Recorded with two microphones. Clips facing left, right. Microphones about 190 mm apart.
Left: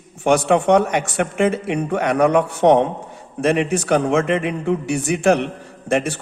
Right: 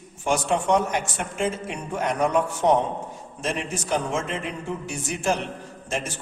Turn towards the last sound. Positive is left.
turn(degrees=65)  # may be behind; listen again after turning